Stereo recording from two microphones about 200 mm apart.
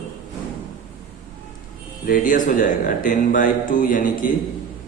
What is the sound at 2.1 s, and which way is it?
Speech, 45° left (ahead or behind).